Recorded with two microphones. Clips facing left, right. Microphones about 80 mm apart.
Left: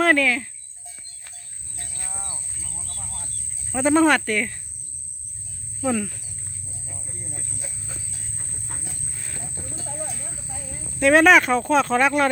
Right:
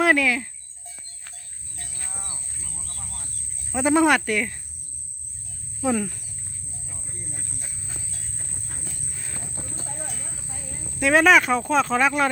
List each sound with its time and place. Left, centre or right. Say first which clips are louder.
0.0 s speech: left 1 dB; centre
1.7 s cricket: left 2 dB; centre
3.7 s speech: left 1 dB; centre
5.8 s speech: even; right
11.0 s speech: left 2 dB; centre